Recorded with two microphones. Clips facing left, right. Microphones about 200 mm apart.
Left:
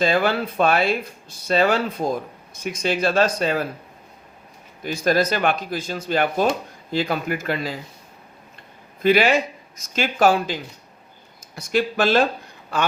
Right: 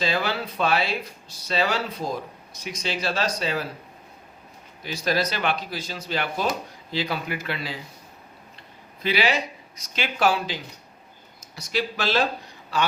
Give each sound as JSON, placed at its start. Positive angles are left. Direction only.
{"t": 0.0, "sound": "speech", "side_deg": 50}
{"t": 4.8, "sound": "speech", "side_deg": 50}
{"t": 9.0, "sound": "speech", "side_deg": 50}